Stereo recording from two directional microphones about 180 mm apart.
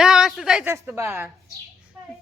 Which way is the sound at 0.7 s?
15° right (ahead or behind).